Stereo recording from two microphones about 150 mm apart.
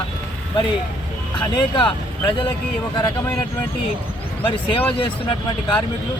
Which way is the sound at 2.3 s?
30° left (ahead or behind).